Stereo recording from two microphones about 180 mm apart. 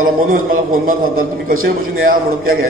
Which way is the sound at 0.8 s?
50° right (ahead or behind).